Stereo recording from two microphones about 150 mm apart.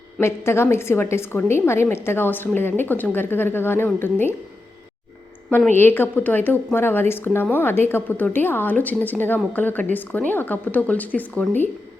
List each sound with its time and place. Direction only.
0.2 s a woman's voice: 15° left (ahead or behind)
5.7 s a woman's voice: 15° left (ahead or behind)